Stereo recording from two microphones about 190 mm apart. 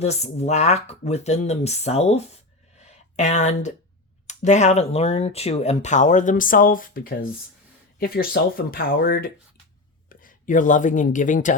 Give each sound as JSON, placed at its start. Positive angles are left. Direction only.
{"t": 0.0, "sound": "speech", "side_deg": 35}